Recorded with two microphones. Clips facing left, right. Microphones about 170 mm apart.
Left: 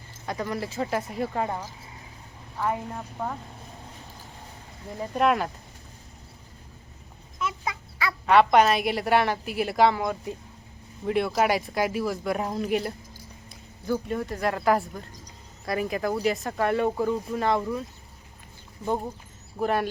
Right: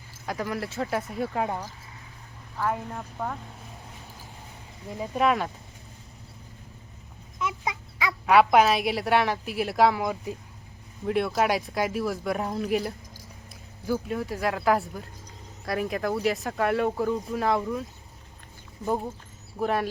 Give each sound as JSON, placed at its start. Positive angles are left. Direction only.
{"t": 0.3, "sound": "a woman's voice", "side_deg": -5}
{"t": 4.9, "sound": "a woman's voice", "side_deg": 0}
{"t": 7.3, "sound": "dog", "side_deg": -20}
{"t": 8.3, "sound": "a woman's voice", "side_deg": -5}
{"t": 18.9, "sound": "a woman's voice", "side_deg": 0}